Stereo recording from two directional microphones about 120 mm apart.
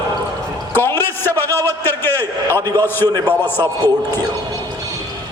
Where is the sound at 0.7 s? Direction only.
20° left (ahead or behind).